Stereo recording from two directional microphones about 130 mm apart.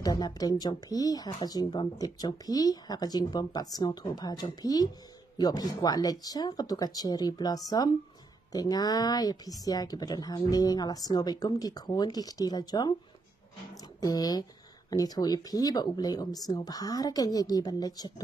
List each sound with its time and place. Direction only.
0.0 s speech: 30° left (ahead or behind)
14.0 s speech: 30° left (ahead or behind)